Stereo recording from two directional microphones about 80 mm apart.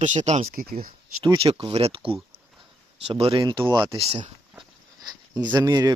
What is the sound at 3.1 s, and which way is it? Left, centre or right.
Speech, right.